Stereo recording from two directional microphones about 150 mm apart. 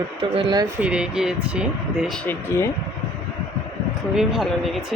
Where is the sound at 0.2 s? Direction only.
35° right (ahead or behind).